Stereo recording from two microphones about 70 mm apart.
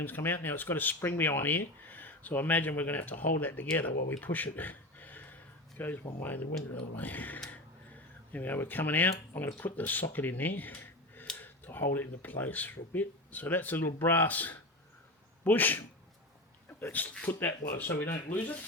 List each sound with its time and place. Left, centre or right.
0.0 s speech: left
16.9 s speech: left